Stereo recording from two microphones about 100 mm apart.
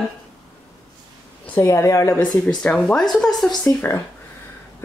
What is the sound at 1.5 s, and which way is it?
Speech, 25° left (ahead or behind).